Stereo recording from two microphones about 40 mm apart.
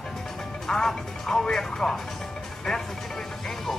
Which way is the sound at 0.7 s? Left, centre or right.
Centre.